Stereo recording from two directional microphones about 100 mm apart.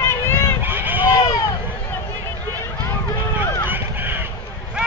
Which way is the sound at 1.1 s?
30° left (ahead or behind).